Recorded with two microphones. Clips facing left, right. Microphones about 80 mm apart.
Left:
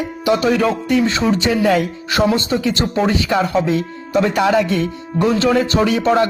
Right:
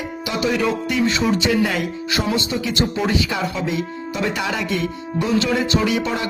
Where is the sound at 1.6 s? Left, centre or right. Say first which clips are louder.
Left 6 dB; left.